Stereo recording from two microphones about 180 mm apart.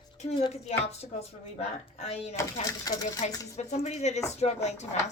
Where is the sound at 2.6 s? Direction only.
20° left (ahead or behind).